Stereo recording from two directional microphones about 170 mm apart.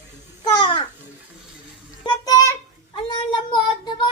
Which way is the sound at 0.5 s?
30° left (ahead or behind).